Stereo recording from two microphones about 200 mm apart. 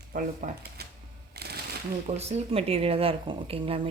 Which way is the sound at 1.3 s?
55° right (ahead or behind).